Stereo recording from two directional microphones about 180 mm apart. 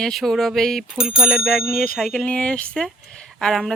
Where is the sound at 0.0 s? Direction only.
Centre (ahead or behind).